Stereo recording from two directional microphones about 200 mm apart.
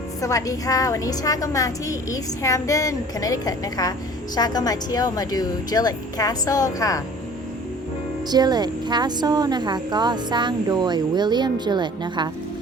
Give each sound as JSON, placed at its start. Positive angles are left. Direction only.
{"t": 0.2, "sound": "a woman's voice", "side_deg": 15}
{"t": 8.3, "sound": "speech", "side_deg": -20}